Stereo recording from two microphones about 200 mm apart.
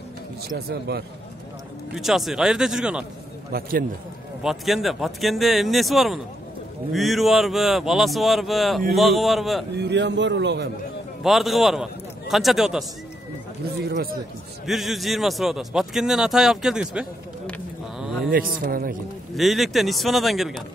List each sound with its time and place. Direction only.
0.4 s speech: 55° right (ahead or behind)
2.0 s speech: centre (ahead or behind)
3.5 s speech: 50° right (ahead or behind)
4.4 s speech: centre (ahead or behind)
9.8 s a man's voice: 60° right (ahead or behind)
11.2 s a man's voice: centre (ahead or behind)
13.8 s speech: 55° right (ahead or behind)
14.7 s speech: centre (ahead or behind)
18.3 s speech: 45° right (ahead or behind)
19.3 s speech: centre (ahead or behind)